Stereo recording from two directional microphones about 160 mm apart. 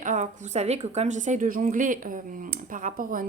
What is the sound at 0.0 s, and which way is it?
A woman's voice, 50° right (ahead or behind).